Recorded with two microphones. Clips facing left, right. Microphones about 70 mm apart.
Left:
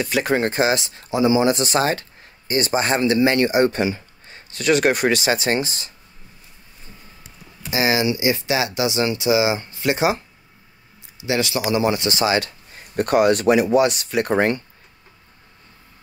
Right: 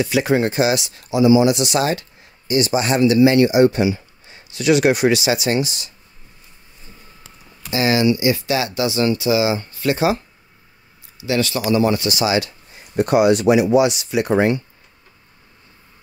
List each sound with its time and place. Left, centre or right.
0.0 s speech: left
7.7 s speech: centre
12.1 s speech: left
12.9 s speech: left